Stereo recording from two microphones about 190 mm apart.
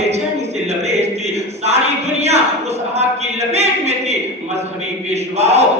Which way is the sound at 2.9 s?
35° right (ahead or behind).